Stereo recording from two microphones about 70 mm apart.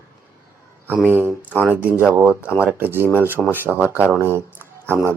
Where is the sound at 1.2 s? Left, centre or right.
Right.